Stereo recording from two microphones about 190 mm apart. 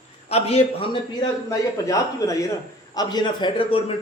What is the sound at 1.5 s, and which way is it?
Speech, 15° left (ahead or behind).